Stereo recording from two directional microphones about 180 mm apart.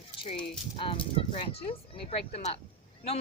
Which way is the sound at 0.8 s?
30° left (ahead or behind).